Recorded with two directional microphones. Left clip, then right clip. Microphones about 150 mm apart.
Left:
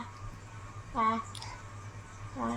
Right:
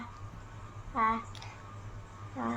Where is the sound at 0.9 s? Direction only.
15° left (ahead or behind).